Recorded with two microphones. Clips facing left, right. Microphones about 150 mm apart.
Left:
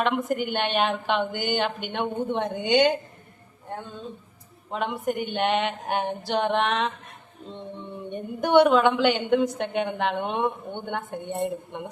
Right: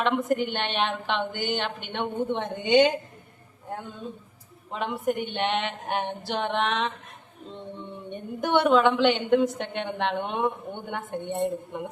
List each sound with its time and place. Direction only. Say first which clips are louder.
0.0 s a woman's voice: even; 5° left (ahead or behind)
4.7 s a woman's voice: even; centre (ahead or behind)
8.1 s a woman's voice: left 5 dB; centre (ahead or behind)